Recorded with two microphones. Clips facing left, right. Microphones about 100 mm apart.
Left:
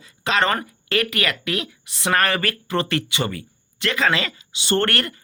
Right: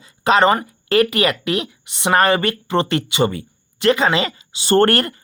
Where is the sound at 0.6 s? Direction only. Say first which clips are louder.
Right 7 dB; 30° right (ahead or behind).